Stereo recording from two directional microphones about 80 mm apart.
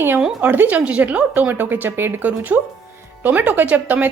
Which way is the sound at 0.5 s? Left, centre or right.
Right.